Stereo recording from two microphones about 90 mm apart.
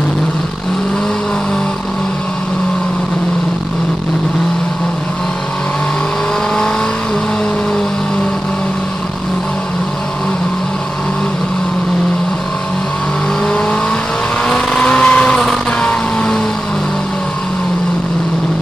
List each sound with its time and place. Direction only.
14.5 s vehicle: 15° left (ahead or behind)